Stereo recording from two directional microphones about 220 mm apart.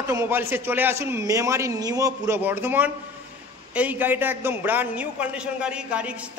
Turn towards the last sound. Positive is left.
turn(degrees=-5)  # may be behind; listen again after turning